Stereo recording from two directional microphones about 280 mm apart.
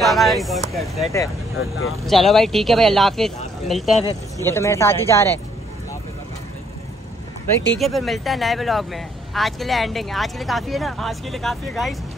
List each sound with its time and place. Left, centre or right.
0.0 s speech: centre
1.6 s speech: left
2.0 s speech: centre
7.8 s speech: centre